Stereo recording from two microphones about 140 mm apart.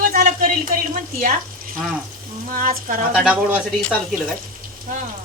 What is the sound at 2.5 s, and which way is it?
Speech, 75° right (ahead or behind).